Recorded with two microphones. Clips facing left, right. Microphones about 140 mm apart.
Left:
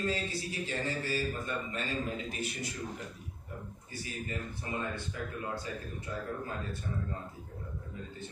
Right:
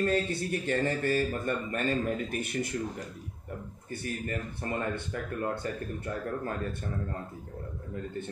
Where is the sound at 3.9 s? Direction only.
55° right (ahead or behind).